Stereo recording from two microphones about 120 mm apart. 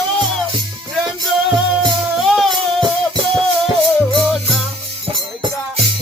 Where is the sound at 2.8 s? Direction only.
40° right (ahead or behind).